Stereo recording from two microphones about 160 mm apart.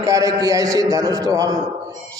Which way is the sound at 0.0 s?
20° right (ahead or behind).